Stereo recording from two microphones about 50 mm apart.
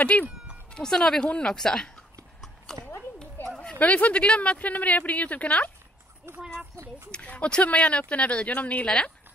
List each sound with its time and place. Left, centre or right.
0.0 s speech: left
0.7 s a woman's voice: centre
2.4 s horse: centre
3.4 s a sound: left
3.8 s a woman's voice: left
6.3 s a child's voice: right
7.1 s a woman's voice: left
8.8 s a woman's voice: centre